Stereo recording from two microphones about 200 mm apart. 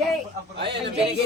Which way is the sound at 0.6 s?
60° right (ahead or behind).